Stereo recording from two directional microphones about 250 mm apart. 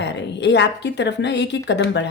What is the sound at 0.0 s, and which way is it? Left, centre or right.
A woman's voice, left.